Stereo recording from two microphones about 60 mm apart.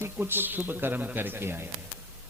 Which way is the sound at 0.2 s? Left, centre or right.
Right.